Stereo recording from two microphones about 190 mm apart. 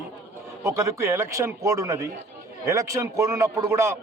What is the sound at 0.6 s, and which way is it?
A man's voice, 15° right (ahead or behind).